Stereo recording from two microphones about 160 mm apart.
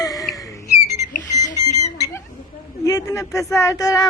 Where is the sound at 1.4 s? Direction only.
25° left (ahead or behind).